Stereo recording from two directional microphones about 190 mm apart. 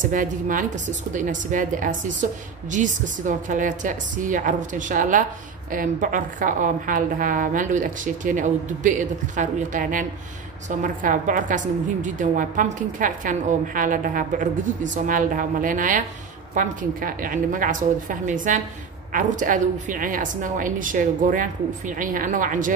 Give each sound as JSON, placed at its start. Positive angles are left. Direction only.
{"t": 0.0, "sound": "a woman's voice", "side_deg": -45}